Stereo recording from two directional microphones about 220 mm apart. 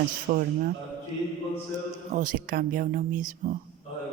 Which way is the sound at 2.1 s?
40° right (ahead or behind).